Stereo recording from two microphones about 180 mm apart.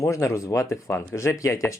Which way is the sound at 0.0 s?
15° left (ahead or behind).